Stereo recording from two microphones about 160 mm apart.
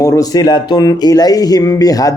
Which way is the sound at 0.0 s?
20° left (ahead or behind).